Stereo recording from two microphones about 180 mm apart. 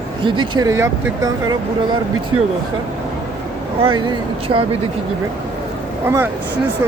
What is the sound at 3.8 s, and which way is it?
Speech, 30° right (ahead or behind).